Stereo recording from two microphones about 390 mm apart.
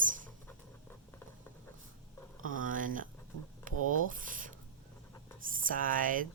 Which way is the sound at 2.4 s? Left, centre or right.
Right.